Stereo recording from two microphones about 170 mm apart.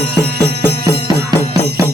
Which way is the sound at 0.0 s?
75° right (ahead or behind).